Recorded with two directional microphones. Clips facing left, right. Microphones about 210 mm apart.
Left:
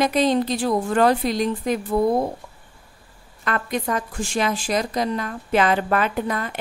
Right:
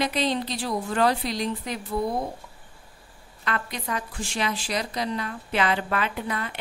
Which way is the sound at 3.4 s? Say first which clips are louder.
Left 6 dB; 50° left (ahead or behind).